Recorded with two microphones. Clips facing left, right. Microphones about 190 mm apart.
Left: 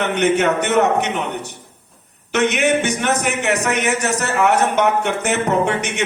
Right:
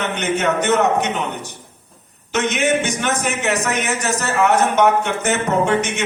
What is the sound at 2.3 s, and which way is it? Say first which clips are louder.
Speech: left 2 dB; 60° left (ahead or behind).